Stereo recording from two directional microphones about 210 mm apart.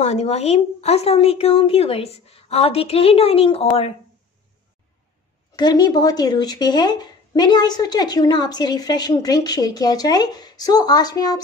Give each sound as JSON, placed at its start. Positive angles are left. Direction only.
{"t": 0.0, "sound": "speech", "side_deg": 30}
{"t": 5.5, "sound": "speech", "side_deg": 20}